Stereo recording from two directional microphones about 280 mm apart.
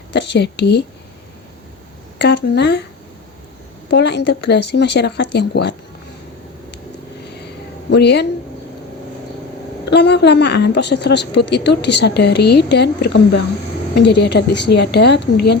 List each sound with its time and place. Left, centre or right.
0.1 s a woman's voice: left
2.1 s a woman's voice: left
3.8 s a woman's voice: left
7.4 s a sound: left
9.9 s a woman's voice: left